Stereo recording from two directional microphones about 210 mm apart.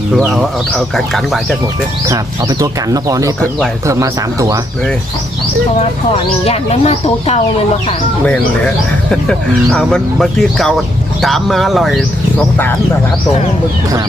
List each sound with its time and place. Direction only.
0.8 s speech: centre (ahead or behind)
2.0 s speech: 15° right (ahead or behind)
6.4 s speech: 30° left (ahead or behind)
8.2 s speech: 5° left (ahead or behind)